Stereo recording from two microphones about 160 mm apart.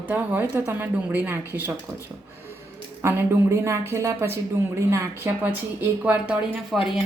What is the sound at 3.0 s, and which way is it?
A woman's voice, 15° right (ahead or behind).